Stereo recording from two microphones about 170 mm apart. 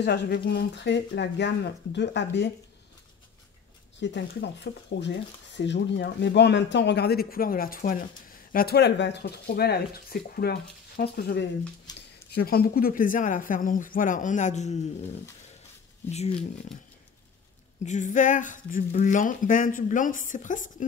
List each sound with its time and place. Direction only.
0.0 s speech: 75° left (ahead or behind)
4.0 s speech: 90° left; by 11.4 s 70° left (ahead or behind)
11.9 s a sound: 25° left (ahead or behind)
12.3 s speech: 65° left (ahead or behind); by 14.8 s 45° left (ahead or behind)
16.0 s speech: 15° left (ahead or behind)
17.8 s speech: 45° left (ahead or behind)